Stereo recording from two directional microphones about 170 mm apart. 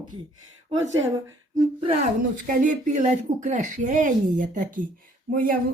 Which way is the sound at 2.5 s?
50° right (ahead or behind).